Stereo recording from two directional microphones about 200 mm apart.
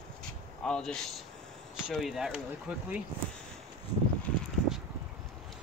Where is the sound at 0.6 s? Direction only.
5° left (ahead or behind).